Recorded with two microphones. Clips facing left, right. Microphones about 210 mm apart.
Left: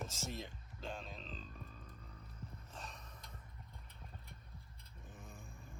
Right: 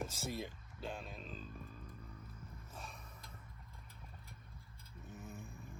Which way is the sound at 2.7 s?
10° right (ahead or behind).